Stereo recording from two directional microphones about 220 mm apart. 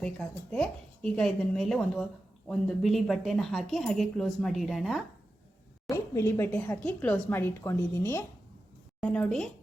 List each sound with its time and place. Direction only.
0.5 s speech: 5° left (ahead or behind)
5.9 s a woman's voice: 15° left (ahead or behind)